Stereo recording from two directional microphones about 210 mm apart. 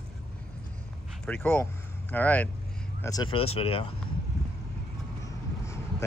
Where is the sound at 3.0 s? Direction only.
15° left (ahead or behind).